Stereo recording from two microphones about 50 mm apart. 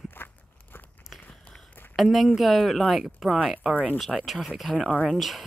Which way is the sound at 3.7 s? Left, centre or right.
Right.